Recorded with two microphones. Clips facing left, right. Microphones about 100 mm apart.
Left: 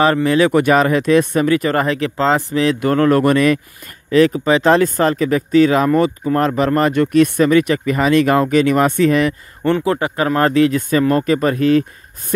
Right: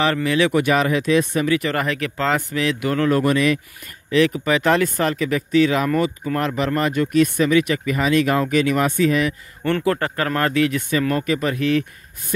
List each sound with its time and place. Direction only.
0.0 s speech: 35° left (ahead or behind); by 3.5 s 55° left (ahead or behind)
4.1 s speech: 35° left (ahead or behind); by 9.3 s 50° left (ahead or behind)
9.6 s speech: 20° left (ahead or behind)
10.4 s speech: 35° left (ahead or behind)